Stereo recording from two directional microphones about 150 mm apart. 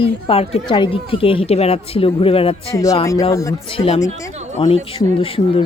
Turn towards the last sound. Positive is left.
turn(degrees=40)  # may be behind; listen again after turning